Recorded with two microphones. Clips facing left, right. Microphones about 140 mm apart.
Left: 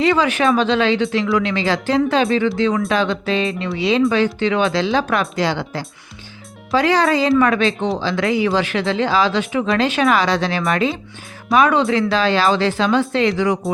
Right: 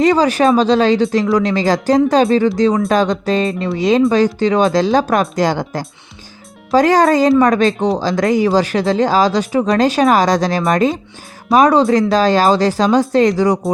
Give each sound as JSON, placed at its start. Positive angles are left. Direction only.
{"t": 0.0, "sound": "speech", "side_deg": -40}